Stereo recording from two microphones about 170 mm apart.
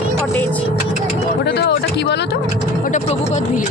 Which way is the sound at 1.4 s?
75° left (ahead or behind).